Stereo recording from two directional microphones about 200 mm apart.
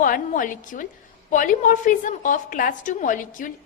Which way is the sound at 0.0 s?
40° left (ahead or behind).